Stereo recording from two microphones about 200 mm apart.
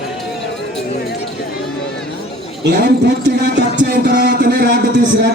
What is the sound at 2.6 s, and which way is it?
A man's voice, 60° right (ahead or behind).